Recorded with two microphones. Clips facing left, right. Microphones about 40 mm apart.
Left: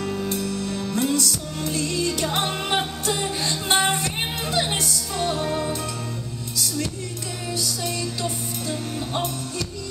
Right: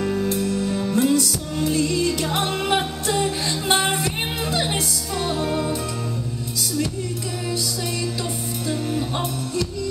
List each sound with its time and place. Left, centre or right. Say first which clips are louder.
0.0 s music: right 4 dB; centre
7.5 s music: left 1 dB; centre